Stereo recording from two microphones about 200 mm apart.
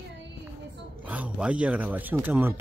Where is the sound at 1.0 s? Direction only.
5° right (ahead or behind).